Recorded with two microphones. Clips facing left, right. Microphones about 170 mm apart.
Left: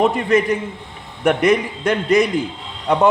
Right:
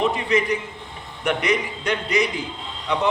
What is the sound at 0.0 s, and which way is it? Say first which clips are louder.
A man's voice: left 5 dB; 50° left (ahead or behind).